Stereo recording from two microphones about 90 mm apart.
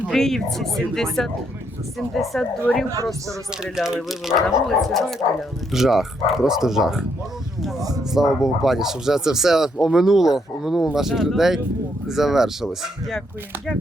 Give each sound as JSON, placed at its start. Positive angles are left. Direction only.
{"t": 0.1, "sound": "speech", "side_deg": 5}
{"t": 3.6, "sound": "speech", "side_deg": -5}
{"t": 7.8, "sound": "speech", "side_deg": -45}
{"t": 8.1, "sound": "speech", "side_deg": -5}